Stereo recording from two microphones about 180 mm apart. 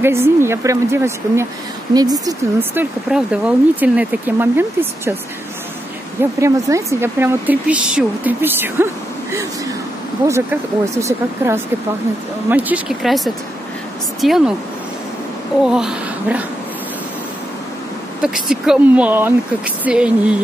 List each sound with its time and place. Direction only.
0.0 s speech: 15° right (ahead or behind)
6.4 s speech: 15° right (ahead or behind)
10.2 s speech: 15° right (ahead or behind)
15.6 s speech: 5° right (ahead or behind)
18.2 s speech: 5° right (ahead or behind)